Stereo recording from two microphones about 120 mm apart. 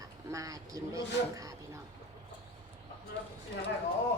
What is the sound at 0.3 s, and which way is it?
Speech, 30° right (ahead or behind).